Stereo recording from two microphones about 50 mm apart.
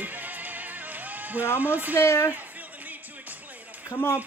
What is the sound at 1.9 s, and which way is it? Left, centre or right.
Speech, left.